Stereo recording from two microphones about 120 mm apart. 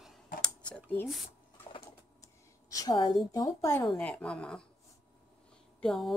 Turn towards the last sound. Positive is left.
turn(degrees=5)  # may be behind; listen again after turning